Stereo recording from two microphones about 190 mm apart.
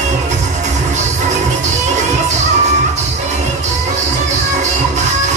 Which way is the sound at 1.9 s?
40° right (ahead or behind).